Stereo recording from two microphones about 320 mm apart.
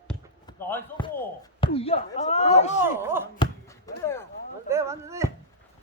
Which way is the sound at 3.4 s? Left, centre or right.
Centre.